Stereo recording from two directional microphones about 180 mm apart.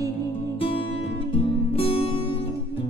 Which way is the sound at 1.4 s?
30° left (ahead or behind).